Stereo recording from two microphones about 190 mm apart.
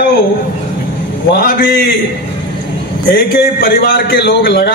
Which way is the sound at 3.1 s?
50° left (ahead or behind).